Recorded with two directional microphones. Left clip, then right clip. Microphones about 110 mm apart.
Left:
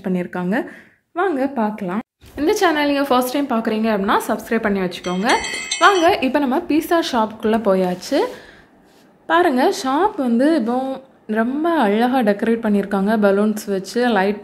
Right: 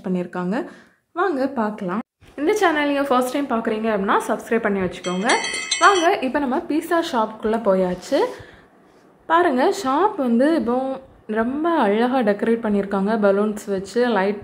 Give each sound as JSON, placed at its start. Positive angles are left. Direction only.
{"t": 0.0, "sound": "a woman's voice", "side_deg": 15}
{"t": 1.1, "sound": "a woman's voice", "side_deg": 5}
{"t": 2.3, "sound": "a woman's voice", "side_deg": 25}
{"t": 5.0, "sound": "speech", "side_deg": 0}
{"t": 6.0, "sound": "a woman's voice", "side_deg": 35}
{"t": 9.3, "sound": "a woman's voice", "side_deg": 15}